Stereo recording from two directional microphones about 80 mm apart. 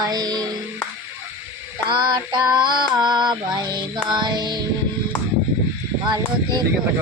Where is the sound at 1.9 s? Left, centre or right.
Right.